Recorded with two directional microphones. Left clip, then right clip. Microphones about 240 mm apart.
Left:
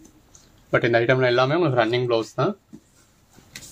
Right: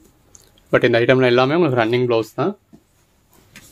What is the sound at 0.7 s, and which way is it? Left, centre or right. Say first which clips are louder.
Speech: right 5 dB; right.